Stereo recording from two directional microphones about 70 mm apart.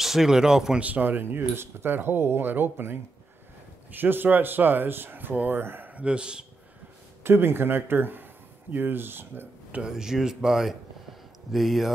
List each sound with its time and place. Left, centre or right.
0.0 s speech: centre
0.8 s speech: right
7.2 s speech: right
9.8 s speech: centre